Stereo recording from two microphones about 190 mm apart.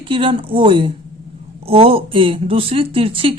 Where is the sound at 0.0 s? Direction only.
25° right (ahead or behind).